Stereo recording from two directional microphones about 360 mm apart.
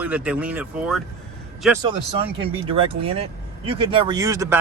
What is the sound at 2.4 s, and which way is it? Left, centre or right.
Speech, centre.